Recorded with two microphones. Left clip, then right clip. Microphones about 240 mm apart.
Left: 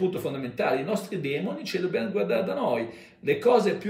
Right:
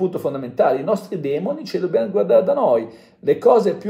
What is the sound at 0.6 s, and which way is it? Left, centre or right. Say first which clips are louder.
Speech: right 9 dB; centre.